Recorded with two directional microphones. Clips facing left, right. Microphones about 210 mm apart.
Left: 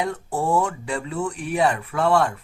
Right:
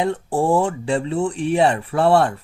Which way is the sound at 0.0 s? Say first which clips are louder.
Right 5 dB; 30° right (ahead or behind).